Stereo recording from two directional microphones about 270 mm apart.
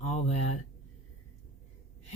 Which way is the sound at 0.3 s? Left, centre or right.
Left.